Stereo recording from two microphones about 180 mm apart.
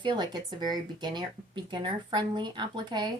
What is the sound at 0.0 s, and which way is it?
A woman's voice, 25° right (ahead or behind).